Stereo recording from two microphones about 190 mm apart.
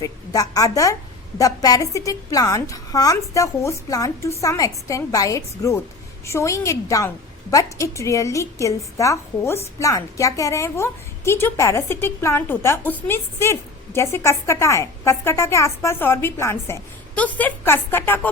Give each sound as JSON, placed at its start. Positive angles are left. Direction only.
{"t": 0.0, "sound": "a woman's voice", "side_deg": 20}